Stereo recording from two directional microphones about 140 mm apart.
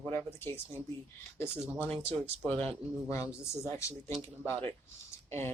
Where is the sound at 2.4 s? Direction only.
10° left (ahead or behind).